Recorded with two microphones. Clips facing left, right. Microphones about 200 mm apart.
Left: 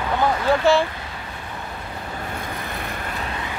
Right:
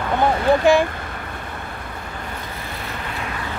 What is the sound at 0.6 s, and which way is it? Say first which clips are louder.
Speech: right 1 dB; 15° right (ahead or behind).